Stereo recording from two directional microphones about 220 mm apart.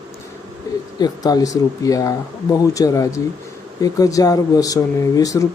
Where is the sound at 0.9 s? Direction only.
20° left (ahead or behind).